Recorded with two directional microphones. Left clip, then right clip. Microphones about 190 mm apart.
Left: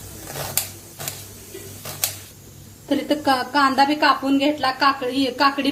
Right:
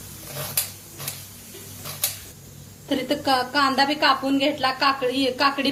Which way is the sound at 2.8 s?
40° left (ahead or behind).